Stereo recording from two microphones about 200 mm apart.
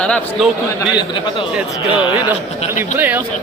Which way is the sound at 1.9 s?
25° left (ahead or behind).